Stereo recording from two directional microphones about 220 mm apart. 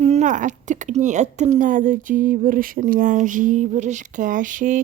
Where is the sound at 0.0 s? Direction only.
30° right (ahead or behind).